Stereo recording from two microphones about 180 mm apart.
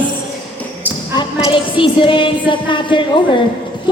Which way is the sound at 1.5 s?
30° left (ahead or behind).